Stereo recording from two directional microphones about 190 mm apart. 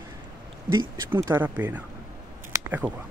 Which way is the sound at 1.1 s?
10° right (ahead or behind).